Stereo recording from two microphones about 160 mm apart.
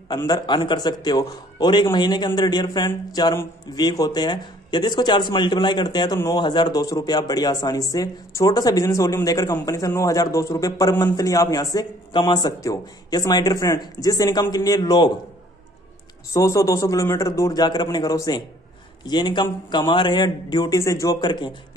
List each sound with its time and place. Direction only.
0.3 s speech: 30° left (ahead or behind)
16.3 s speech: 20° left (ahead or behind)